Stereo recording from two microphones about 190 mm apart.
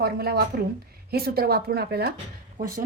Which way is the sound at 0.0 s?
55° right (ahead or behind).